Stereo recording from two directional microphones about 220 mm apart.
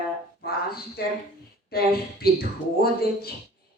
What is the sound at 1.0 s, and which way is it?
Speech, 45° left (ahead or behind).